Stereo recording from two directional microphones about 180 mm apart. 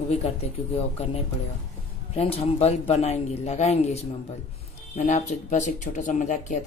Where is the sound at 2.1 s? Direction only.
35° left (ahead or behind).